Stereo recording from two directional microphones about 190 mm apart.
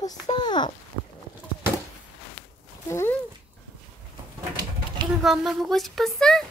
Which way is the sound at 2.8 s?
10° left (ahead or behind).